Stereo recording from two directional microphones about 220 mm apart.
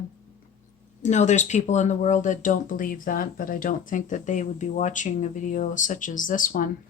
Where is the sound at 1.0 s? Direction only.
30° left (ahead or behind).